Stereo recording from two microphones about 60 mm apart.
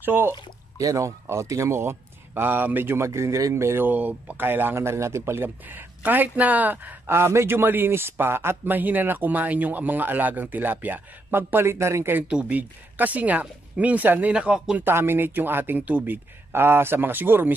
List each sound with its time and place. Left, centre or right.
0.0 s speech: right
0.3 s a sound: right
1.2 s speech: right
3.1 s speech: right
3.5 s speech: right
3.8 s speech: right
7.1 s speech: right
12.3 s speech: right
14.3 s speech: centre
14.8 s speech: right
16.5 s speech: right